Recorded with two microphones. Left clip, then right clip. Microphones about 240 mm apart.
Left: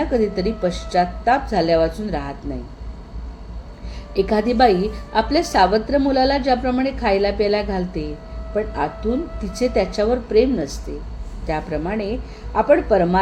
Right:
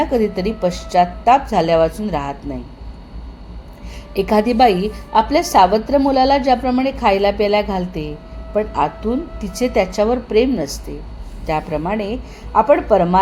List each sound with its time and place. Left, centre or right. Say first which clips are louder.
0.1 s a woman's voice: right 2 dB; right
4.1 s a woman's voice: right 3 dB; right